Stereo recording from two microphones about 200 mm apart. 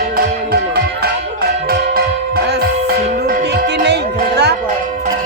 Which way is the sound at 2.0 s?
55° right (ahead or behind).